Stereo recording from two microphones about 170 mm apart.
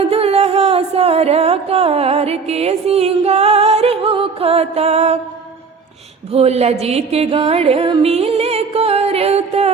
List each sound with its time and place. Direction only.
0.1 s music: 35° right (ahead or behind)
6.3 s music: 40° right (ahead or behind)